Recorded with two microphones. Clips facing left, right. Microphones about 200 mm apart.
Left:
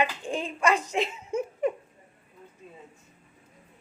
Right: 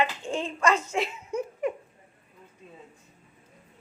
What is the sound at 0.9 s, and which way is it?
Laughter, 25° left (ahead or behind).